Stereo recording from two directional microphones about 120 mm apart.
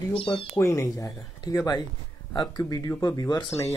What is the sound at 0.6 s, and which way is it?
Speech, 25° left (ahead or behind).